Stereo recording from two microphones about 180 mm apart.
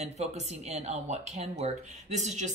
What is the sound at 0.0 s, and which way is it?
Speech, 35° right (ahead or behind).